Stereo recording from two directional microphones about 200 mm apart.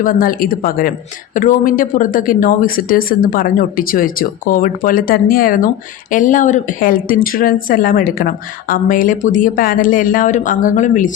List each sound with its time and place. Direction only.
0.0 s a woman's voice: 45° left (ahead or behind)